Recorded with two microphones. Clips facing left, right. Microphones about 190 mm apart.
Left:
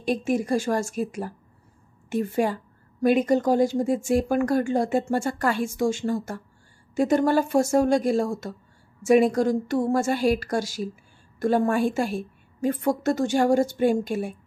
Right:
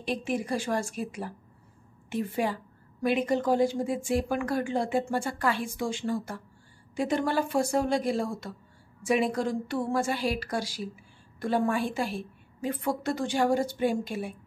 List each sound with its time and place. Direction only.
0.0 s a woman's voice: 45° left (ahead or behind)